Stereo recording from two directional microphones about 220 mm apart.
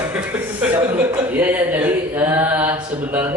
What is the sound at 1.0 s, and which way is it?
Speech, 10° right (ahead or behind).